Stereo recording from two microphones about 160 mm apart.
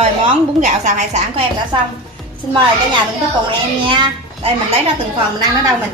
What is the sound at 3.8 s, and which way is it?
Speech, 35° right (ahead or behind).